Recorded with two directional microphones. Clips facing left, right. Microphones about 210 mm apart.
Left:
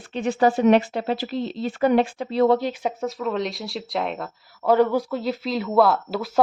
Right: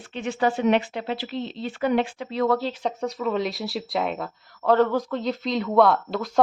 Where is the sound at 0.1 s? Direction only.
40° left (ahead or behind).